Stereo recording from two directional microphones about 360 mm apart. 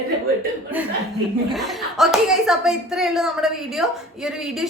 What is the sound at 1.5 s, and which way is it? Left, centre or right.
Speech, centre.